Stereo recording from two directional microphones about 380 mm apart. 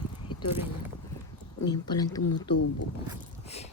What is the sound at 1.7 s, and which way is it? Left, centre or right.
Speech, centre.